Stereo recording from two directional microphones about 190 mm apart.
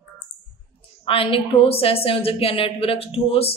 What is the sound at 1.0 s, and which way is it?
A woman's voice, 30° left (ahead or behind).